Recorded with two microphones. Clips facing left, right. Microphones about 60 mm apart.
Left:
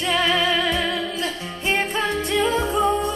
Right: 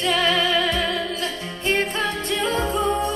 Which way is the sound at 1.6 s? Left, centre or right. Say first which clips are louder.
Even; centre.